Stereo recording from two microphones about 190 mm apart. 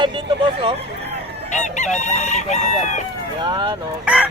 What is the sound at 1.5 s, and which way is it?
Chicken, 40° left (ahead or behind).